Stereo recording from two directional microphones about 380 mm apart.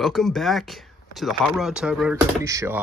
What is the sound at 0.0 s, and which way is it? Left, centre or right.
Speech, centre.